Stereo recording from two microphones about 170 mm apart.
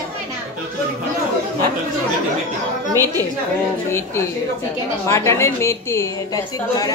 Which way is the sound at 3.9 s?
15° left (ahead or behind).